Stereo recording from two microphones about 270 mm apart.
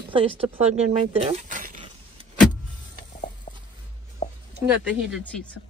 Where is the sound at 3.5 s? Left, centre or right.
Left.